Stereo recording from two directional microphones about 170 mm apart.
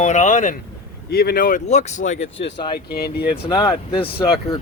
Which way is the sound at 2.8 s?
70° left (ahead or behind).